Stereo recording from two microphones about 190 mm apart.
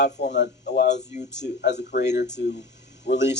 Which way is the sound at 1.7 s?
60° left (ahead or behind).